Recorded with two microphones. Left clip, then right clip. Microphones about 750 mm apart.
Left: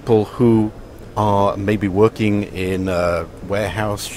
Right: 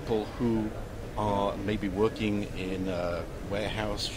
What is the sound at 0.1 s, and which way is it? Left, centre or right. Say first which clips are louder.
Speech: left 15 dB; left.